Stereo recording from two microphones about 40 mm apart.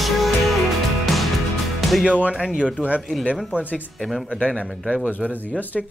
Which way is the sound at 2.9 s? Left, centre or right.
Right.